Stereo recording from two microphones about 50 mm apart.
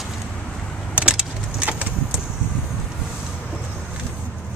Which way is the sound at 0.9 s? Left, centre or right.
Centre.